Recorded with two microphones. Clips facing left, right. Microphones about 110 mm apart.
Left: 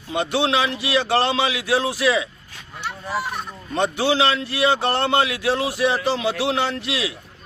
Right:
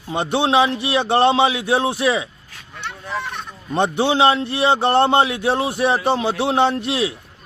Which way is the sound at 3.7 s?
25° right (ahead or behind).